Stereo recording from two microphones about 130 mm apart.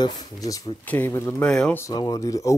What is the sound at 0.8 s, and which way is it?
Speech, 15° left (ahead or behind).